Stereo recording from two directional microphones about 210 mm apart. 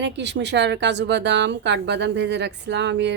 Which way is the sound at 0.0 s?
55° right (ahead or behind).